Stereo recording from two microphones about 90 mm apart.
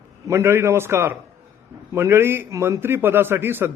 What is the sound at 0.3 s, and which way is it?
A man's voice, 30° right (ahead or behind).